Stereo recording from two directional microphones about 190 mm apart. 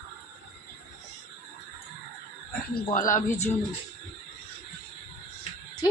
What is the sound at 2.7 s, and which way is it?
Speech, 45° left (ahead or behind).